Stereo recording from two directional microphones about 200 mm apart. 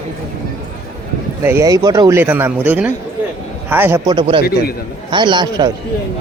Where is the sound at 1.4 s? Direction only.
15° right (ahead or behind).